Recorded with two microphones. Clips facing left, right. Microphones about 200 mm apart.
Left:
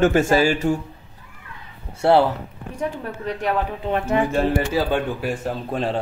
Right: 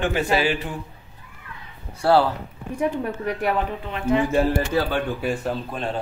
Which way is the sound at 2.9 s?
10° right (ahead or behind).